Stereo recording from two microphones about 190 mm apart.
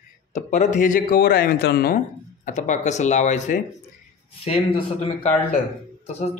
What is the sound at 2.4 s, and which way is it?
Speech, 40° left (ahead or behind).